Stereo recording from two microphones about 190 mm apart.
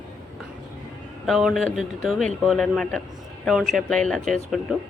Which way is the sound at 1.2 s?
Centre (ahead or behind).